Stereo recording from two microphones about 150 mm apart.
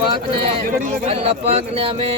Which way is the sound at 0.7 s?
60° right (ahead or behind).